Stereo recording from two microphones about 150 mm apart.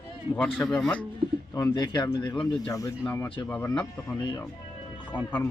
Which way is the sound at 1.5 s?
25° left (ahead or behind).